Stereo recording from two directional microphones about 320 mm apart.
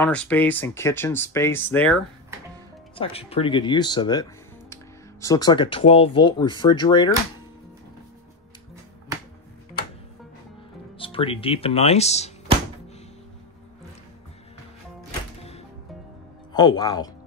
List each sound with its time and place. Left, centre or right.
0.0 s speech: centre
3.0 s speech: centre
11.0 s speech: centre
16.5 s speech: centre